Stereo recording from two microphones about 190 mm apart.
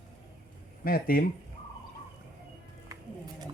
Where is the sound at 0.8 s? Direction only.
50° left (ahead or behind).